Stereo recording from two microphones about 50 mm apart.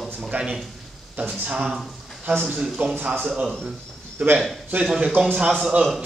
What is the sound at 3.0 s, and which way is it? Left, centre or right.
Speech, right.